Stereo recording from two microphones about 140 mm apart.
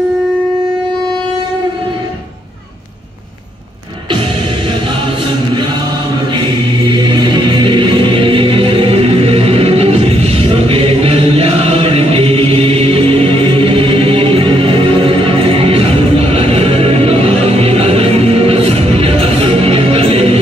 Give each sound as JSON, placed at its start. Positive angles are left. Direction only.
{"t": 6.9, "sound": "music", "side_deg": -35}